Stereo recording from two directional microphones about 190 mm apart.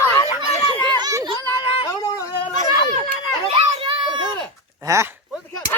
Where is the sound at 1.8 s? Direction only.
20° left (ahead or behind).